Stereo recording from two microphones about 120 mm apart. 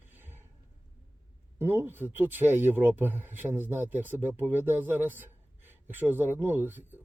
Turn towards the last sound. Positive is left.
turn(degrees=-15)  # may be behind; listen again after turning